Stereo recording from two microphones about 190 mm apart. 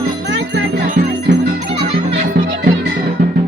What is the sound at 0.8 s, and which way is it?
Music, 45° right (ahead or behind).